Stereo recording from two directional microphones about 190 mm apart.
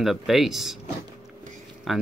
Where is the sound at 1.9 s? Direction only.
Centre (ahead or behind).